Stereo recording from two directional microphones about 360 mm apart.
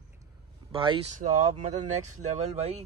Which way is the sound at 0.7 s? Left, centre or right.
Centre.